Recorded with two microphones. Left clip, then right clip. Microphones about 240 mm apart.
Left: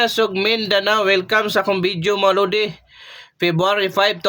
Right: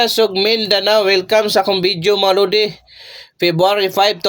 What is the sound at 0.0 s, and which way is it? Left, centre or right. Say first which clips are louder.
Speech: right 3 dB; centre.